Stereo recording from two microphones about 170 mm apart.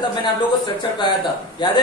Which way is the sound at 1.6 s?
25° left (ahead or behind).